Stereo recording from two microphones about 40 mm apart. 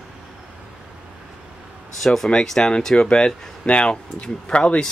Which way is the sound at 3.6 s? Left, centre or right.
Left.